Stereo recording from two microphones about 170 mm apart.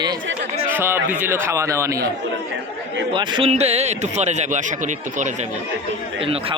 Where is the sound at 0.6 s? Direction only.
15° right (ahead or behind).